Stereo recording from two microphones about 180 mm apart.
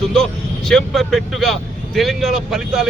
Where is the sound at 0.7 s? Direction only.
Centre (ahead or behind).